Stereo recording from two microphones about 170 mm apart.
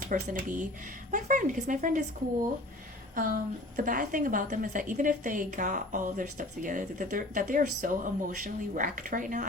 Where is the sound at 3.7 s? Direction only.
50° right (ahead or behind).